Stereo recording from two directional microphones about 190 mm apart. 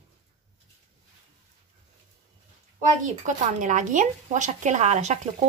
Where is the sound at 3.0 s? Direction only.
40° right (ahead or behind).